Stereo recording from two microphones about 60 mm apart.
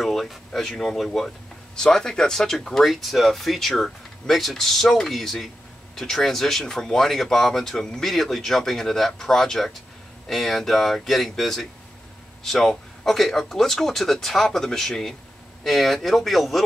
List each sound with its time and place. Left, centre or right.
0.0 s speech: centre